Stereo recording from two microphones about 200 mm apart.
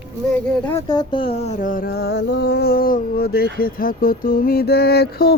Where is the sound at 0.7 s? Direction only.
15° left (ahead or behind); by 5.4 s 50° left (ahead or behind).